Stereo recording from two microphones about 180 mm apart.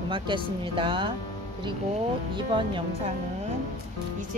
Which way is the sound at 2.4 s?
25° right (ahead or behind).